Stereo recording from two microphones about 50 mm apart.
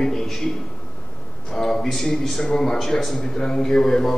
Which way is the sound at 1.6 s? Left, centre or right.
Centre.